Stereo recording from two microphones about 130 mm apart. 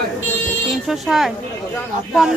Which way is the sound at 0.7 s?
Centre (ahead or behind).